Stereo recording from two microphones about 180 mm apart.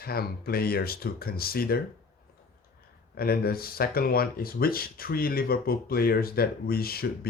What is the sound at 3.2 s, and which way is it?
Speech, 55° left (ahead or behind).